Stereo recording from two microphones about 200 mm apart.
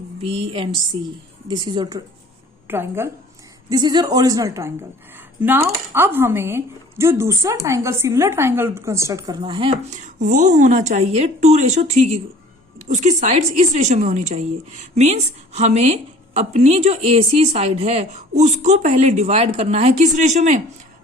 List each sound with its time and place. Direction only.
0.2 s a woman's voice: 30° right (ahead or behind)
2.6 s a woman's voice: 10° right (ahead or behind); by 20.6 s 35° right (ahead or behind)